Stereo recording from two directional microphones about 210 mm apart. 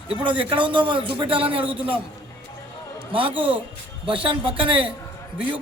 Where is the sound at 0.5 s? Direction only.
25° right (ahead or behind).